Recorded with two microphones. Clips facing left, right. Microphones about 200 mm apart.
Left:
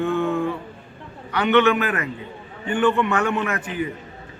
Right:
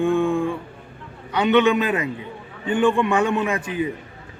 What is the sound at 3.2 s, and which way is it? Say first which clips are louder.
Speech: right 2 dB; 25° right (ahead or behind).